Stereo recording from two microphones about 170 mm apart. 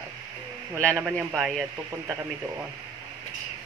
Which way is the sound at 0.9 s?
Centre (ahead or behind).